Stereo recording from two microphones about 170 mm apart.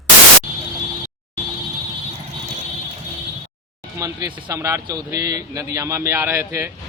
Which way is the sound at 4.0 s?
20° right (ahead or behind).